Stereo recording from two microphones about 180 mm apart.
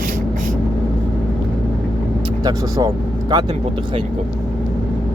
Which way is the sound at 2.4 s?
20° right (ahead or behind).